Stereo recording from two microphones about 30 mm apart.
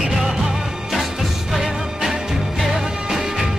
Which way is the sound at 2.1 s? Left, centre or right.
Centre.